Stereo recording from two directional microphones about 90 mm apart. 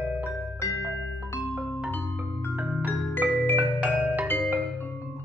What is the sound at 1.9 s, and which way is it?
Music, 20° left (ahead or behind).